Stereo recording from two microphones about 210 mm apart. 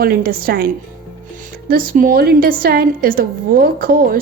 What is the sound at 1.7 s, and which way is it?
A woman's voice, 40° right (ahead or behind).